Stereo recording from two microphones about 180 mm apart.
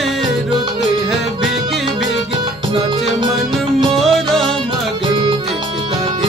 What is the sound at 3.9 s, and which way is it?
Music, centre (ahead or behind).